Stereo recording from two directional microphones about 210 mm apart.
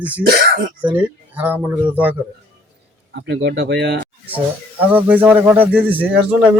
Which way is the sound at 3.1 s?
55° right (ahead or behind).